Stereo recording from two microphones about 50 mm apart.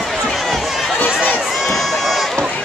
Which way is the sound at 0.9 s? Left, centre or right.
Left.